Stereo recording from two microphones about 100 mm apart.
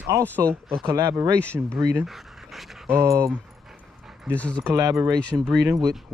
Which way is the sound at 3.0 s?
30° right (ahead or behind).